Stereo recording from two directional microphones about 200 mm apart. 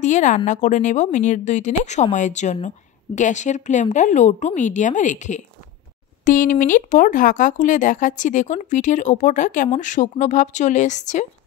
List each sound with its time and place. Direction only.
0.0 s speech: 35° left (ahead or behind)